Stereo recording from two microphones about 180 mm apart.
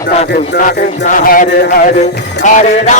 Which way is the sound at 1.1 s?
50° left (ahead or behind).